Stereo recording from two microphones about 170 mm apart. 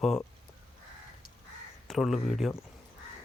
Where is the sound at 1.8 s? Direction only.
Centre (ahead or behind).